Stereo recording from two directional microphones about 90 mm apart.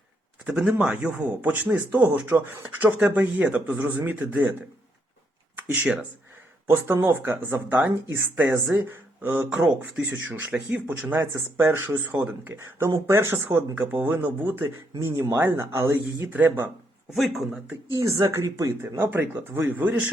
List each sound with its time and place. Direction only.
0.6 s speech: 5° right (ahead or behind)
5.5 s speech: 15° right (ahead or behind)
9.5 s speech: 15° right (ahead or behind); by 16.3 s 30° right (ahead or behind)
17.2 s speech: centre (ahead or behind)
18.2 s speech: 35° right (ahead or behind)